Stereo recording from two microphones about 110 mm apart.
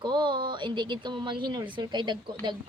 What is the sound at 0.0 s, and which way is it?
Speech, 45° right (ahead or behind).